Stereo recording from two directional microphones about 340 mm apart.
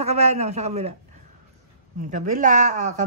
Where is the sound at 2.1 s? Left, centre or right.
Right.